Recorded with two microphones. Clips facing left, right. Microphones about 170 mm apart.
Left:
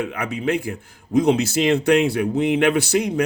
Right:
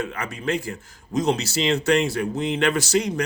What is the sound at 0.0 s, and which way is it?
Speech, 60° left (ahead or behind).